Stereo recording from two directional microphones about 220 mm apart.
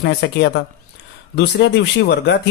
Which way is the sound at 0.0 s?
50° left (ahead or behind).